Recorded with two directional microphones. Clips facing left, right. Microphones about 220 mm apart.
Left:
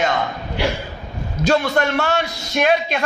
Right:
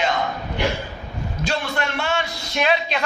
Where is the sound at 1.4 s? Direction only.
45° left (ahead or behind).